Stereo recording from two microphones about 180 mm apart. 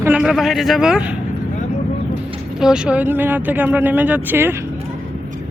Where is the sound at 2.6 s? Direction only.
5° right (ahead or behind).